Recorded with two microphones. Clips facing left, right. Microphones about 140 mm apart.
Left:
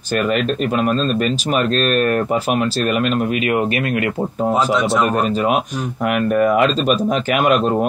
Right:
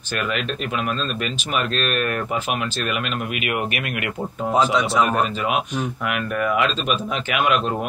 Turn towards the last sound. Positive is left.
turn(degrees=40)  # may be behind; listen again after turning